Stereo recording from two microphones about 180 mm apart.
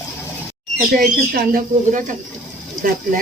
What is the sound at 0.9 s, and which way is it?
Speech, 50° right (ahead or behind).